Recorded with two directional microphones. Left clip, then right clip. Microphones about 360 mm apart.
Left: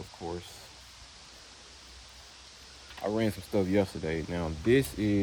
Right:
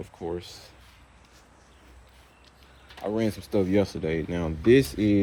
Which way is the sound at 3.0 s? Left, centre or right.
Left.